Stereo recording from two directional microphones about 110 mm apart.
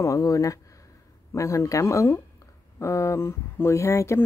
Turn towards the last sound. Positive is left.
turn(degrees=25)  # may be behind; listen again after turning